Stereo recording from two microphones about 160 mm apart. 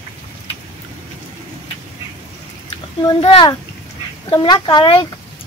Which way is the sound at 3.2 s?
35° left (ahead or behind).